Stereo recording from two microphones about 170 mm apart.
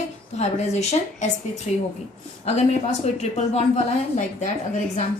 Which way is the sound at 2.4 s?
40° left (ahead or behind).